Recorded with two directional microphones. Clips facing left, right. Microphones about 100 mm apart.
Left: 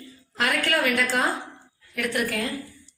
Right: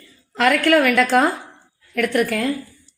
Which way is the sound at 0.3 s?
75° right (ahead or behind).